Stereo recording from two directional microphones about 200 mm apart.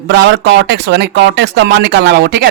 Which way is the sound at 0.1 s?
55° right (ahead or behind).